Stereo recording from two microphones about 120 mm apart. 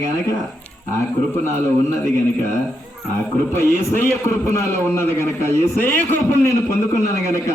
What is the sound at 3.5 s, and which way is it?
A man's voice, 20° left (ahead or behind).